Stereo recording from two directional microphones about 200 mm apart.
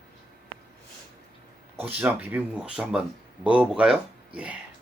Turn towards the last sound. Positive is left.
turn(degrees=-5)  # may be behind; listen again after turning